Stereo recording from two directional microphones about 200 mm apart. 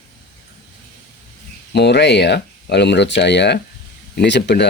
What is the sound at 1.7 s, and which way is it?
Speech, 60° left (ahead or behind).